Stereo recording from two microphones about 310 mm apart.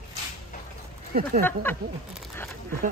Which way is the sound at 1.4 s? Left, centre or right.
Centre.